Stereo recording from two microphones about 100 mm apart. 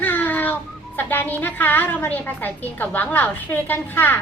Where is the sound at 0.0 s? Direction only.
20° left (ahead or behind).